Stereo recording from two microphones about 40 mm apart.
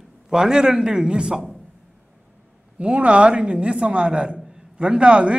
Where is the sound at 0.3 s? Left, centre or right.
Centre.